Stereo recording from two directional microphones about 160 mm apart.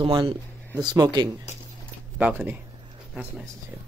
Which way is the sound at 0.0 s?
30° right (ahead or behind).